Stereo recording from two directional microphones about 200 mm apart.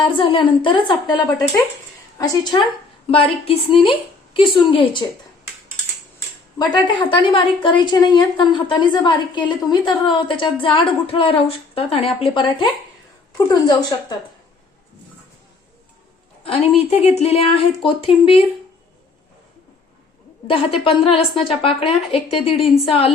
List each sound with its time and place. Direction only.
0.0 s a woman's voice: 25° left (ahead or behind)
6.7 s a woman's voice: 25° left (ahead or behind)
16.4 s a woman's voice: 30° left (ahead or behind)
20.5 s a woman's voice: 30° left (ahead or behind)